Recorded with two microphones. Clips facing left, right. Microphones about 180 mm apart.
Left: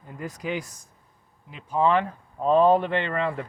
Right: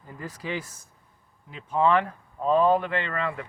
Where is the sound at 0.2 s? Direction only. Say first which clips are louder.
Left 3 dB; 20° left (ahead or behind).